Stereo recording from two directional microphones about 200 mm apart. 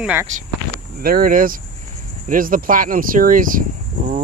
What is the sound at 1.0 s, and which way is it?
Speech, 45° right (ahead or behind).